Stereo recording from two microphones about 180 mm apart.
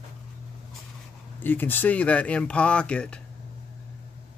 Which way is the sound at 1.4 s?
10° left (ahead or behind).